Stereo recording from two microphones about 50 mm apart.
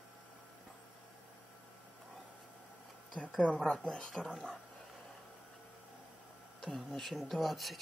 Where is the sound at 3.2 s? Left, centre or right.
Left.